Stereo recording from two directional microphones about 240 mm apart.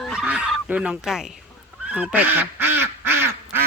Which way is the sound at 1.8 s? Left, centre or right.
Centre.